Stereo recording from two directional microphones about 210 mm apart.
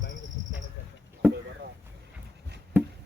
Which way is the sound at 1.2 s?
10° right (ahead or behind).